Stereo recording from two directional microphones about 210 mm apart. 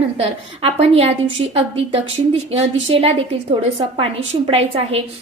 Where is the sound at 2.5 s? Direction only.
30° right (ahead or behind).